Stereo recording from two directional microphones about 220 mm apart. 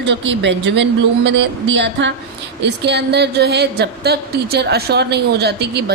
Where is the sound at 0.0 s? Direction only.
55° right (ahead or behind).